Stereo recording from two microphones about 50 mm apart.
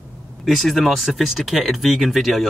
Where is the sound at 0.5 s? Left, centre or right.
Centre.